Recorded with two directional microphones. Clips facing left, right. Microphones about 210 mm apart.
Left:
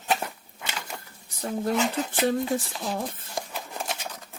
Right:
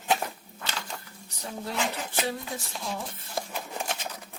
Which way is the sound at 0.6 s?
15° left (ahead or behind).